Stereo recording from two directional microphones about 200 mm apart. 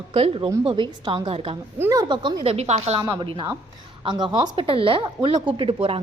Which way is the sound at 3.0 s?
20° right (ahead or behind).